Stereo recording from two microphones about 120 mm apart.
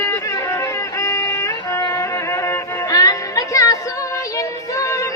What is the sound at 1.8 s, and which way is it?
Music, 35° left (ahead or behind).